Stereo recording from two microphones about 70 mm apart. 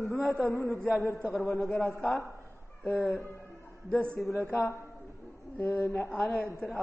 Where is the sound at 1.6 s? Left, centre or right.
Centre.